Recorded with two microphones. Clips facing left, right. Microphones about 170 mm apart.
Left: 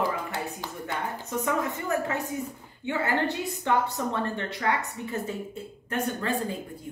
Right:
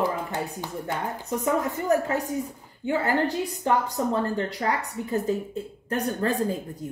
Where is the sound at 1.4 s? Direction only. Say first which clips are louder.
Right 3 dB; 35° right (ahead or behind).